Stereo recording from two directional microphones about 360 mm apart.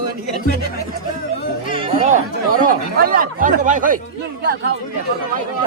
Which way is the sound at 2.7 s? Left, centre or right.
Right.